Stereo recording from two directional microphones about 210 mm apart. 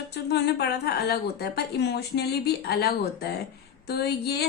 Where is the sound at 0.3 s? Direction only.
50° left (ahead or behind).